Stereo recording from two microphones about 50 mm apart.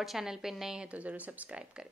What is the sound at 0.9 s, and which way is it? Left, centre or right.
Speech, right.